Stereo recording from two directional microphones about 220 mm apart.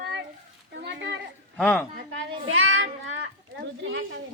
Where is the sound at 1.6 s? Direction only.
5° left (ahead or behind).